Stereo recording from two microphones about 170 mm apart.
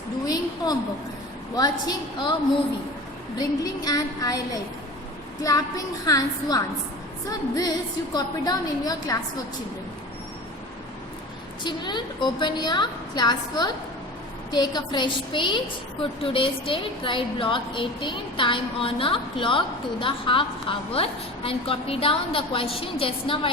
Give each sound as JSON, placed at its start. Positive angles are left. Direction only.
{"t": 0.3, "sound": "a sound", "side_deg": 20}
{"t": 1.5, "sound": "a woman's voice", "side_deg": 25}
{"t": 3.3, "sound": "a woman's voice", "side_deg": 25}
{"t": 5.4, "sound": "a woman's voice", "side_deg": 20}
{"t": 11.6, "sound": "a woman's voice", "side_deg": 25}